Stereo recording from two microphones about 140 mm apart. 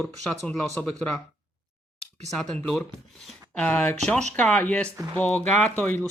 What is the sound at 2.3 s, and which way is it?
Speech, 5° left (ahead or behind).